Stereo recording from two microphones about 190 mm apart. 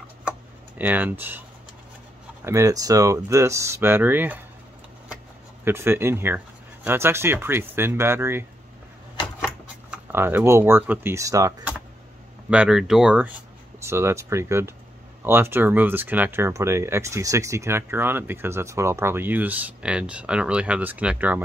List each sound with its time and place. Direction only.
0.2 s tick-tock: 5° right (ahead or behind)
2.4 s speech: 15° right (ahead or behind)
5.7 s speech: 10° right (ahead or behind)
12.4 s speech: 5° right (ahead or behind)